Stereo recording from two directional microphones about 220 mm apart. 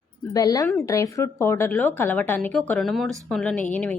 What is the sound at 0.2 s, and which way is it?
A woman's voice, 15° left (ahead or behind).